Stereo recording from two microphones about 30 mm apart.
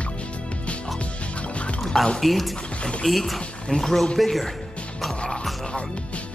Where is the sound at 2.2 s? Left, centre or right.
Centre.